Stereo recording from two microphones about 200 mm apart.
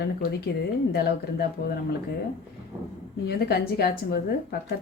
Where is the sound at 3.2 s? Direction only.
55° left (ahead or behind).